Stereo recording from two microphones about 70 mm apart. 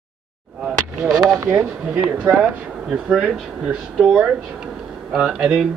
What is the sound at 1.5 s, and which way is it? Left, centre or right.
Speech, centre.